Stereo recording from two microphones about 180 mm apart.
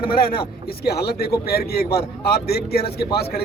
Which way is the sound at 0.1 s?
55° left (ahead or behind).